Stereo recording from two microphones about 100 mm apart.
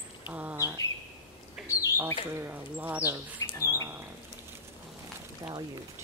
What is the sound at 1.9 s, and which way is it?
Speech, 25° right (ahead or behind).